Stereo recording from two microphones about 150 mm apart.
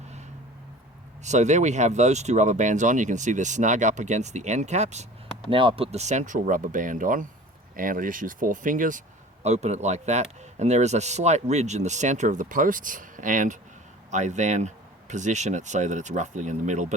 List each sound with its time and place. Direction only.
1.2 s speech: 50° right (ahead or behind)
5.5 s speech: 35° right (ahead or behind); by 9.0 s 60° right (ahead or behind)
9.4 s speech: 50° right (ahead or behind)